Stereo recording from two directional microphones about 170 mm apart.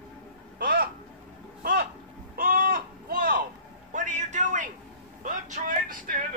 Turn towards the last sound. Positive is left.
turn(degrees=-55)  # may be behind; listen again after turning